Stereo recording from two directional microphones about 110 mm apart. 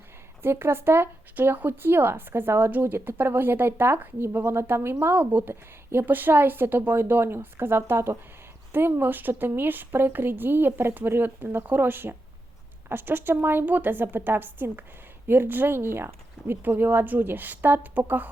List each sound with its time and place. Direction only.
0.4 s speech: 20° right (ahead or behind)